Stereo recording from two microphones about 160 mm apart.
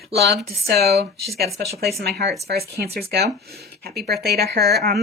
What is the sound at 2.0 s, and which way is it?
Speech, 85° right.